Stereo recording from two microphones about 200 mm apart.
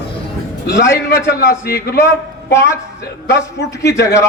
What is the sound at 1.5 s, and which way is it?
Speech, 50° left (ahead or behind).